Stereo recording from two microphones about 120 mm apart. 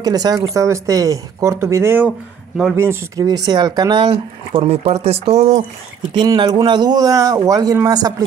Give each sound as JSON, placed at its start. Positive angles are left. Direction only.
{"t": 0.0, "sound": "speech", "side_deg": -30}
{"t": 3.2, "sound": "a man's voice", "side_deg": -35}
{"t": 6.2, "sound": "a man's voice", "side_deg": -35}